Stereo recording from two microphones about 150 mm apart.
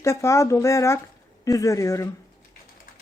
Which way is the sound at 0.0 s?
20° left (ahead or behind).